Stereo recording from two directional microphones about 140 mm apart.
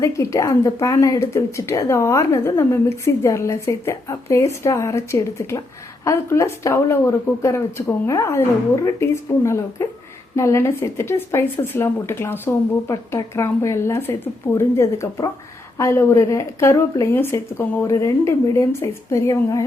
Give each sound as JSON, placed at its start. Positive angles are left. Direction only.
{"t": 0.0, "sound": "speech", "side_deg": 20}